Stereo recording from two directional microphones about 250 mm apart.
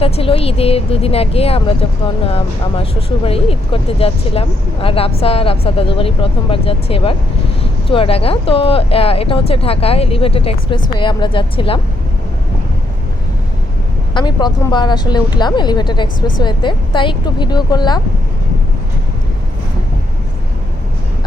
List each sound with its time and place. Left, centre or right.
0.0 s speech: left
14.1 s a woman's voice: centre